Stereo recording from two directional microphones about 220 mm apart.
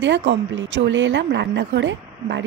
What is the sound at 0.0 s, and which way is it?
A woman's voice, 55° right (ahead or behind).